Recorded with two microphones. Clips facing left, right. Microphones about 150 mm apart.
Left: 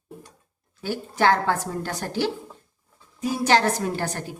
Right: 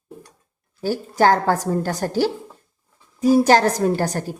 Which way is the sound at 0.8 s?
40° right (ahead or behind).